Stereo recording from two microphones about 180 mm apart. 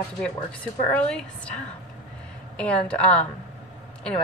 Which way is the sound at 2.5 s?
5° left (ahead or behind).